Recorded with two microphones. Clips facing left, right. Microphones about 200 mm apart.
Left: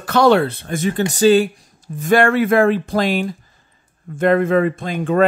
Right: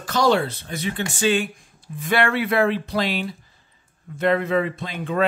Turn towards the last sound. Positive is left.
turn(degrees=50)  # may be behind; listen again after turning